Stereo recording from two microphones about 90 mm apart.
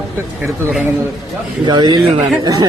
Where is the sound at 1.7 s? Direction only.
60° right (ahead or behind).